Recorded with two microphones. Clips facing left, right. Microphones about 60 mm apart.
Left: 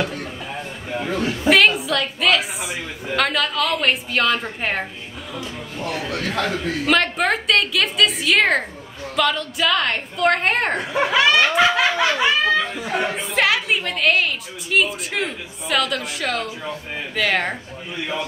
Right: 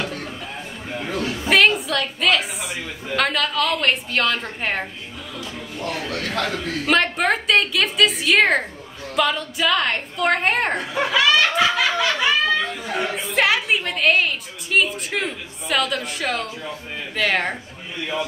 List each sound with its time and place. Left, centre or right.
0.0 s a sound: centre
1.5 s a woman's voice: centre
10.8 s snicker: left
13.1 s a woman's voice: centre